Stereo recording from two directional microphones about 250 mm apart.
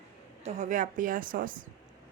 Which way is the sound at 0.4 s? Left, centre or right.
Right.